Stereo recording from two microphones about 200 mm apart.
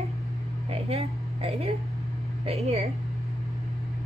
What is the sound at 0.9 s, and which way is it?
A woman's voice, 30° right (ahead or behind).